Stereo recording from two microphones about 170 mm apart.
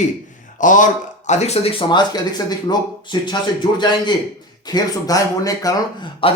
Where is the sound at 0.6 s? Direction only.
50° left (ahead or behind); by 5.7 s 20° left (ahead or behind).